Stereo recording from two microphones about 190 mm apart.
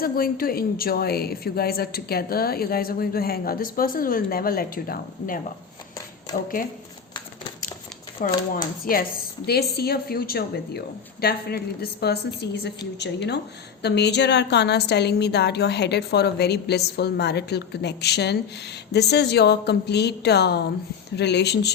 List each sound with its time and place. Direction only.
0.0 s a woman's voice: 50° left (ahead or behind)
8.2 s a woman's voice: 45° left (ahead or behind)